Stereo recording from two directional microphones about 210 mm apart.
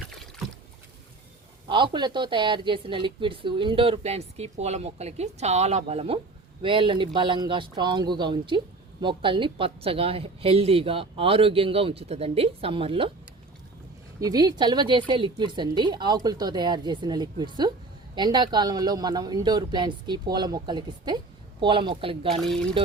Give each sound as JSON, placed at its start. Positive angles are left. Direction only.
{"t": 1.6, "sound": "a woman's voice", "side_deg": -20}
{"t": 14.2, "sound": "a woman's voice", "side_deg": -20}
{"t": 22.4, "sound": "speech", "side_deg": 0}